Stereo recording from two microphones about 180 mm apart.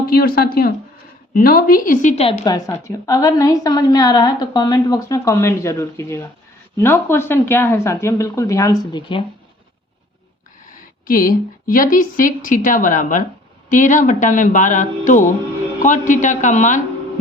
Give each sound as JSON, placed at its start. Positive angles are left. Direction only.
{"t": 0.0, "sound": "a woman's voice", "side_deg": 55}
{"t": 2.4, "sound": "a woman's voice", "side_deg": 20}
{"t": 11.0, "sound": "a woman's voice", "side_deg": 50}